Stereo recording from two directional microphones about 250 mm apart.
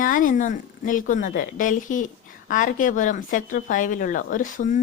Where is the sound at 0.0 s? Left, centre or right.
Left.